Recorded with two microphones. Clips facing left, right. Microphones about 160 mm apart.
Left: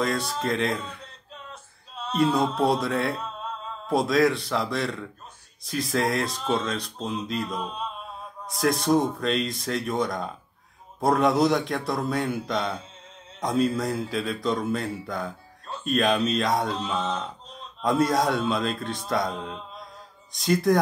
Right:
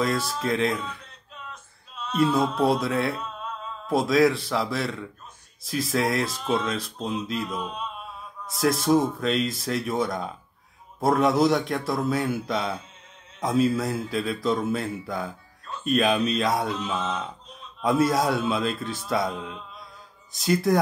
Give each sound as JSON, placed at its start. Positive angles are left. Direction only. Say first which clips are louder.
{"t": 0.0, "sound": "speech", "louder": "right 1 dB", "side_deg": 0}
{"t": 1.5, "sound": "male singing", "louder": "left 1 dB", "side_deg": 30}
{"t": 2.1, "sound": "speech", "louder": "even", "side_deg": 0}